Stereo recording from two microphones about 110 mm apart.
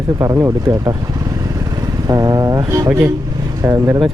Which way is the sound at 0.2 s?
30° right (ahead or behind).